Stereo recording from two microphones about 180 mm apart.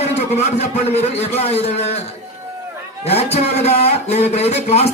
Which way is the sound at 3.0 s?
35° left (ahead or behind).